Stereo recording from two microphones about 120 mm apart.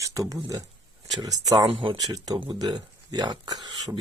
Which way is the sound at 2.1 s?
35° right (ahead or behind).